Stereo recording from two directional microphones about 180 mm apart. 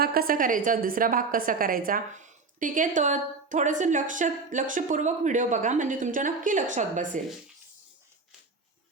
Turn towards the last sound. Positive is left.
turn(degrees=-45)  # may be behind; listen again after turning